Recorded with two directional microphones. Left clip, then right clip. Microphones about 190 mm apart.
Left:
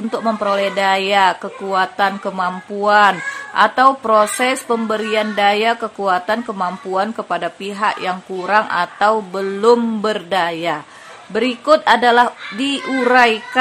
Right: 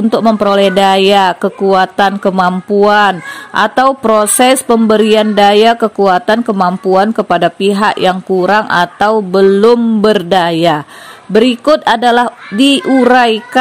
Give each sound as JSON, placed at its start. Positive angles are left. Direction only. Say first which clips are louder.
{"t": 0.1, "sound": "speech", "louder": "right 7 dB", "side_deg": -40}